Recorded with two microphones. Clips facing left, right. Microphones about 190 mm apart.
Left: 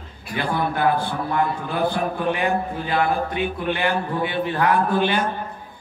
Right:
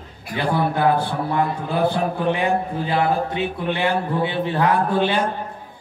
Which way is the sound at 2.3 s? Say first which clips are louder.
Right 2 dB; 25° right (ahead or behind).